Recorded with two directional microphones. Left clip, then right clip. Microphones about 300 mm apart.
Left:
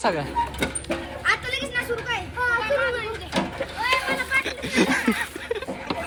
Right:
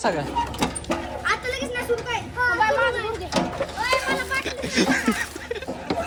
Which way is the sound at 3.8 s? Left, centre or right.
Right.